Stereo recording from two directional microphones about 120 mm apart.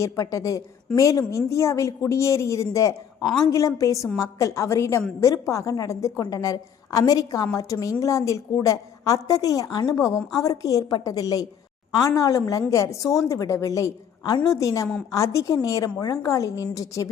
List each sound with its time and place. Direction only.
0.0 s a woman's voice: 25° left (ahead or behind)